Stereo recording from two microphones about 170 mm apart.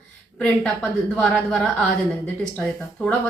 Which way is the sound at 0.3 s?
5° left (ahead or behind).